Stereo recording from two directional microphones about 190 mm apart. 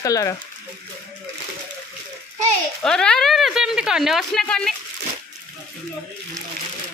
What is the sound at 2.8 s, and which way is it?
A woman's voice, 5° left (ahead or behind).